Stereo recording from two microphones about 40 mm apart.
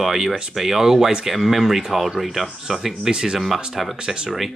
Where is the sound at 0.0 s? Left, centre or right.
Centre.